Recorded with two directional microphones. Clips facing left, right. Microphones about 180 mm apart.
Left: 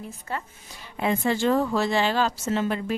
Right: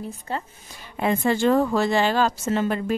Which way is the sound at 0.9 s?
50° right (ahead or behind).